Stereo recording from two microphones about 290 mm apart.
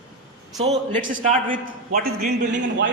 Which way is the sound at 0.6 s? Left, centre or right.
Right.